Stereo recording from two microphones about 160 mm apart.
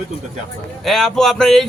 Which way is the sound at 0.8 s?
Centre (ahead or behind).